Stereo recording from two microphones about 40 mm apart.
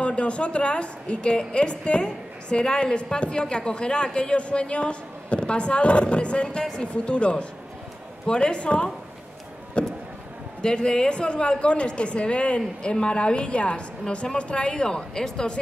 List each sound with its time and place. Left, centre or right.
0.0 s a woman's voice: left
6.6 s speech: centre
6.9 s a woman's voice: left
9.8 s vehicle: left
10.6 s a woman's voice: centre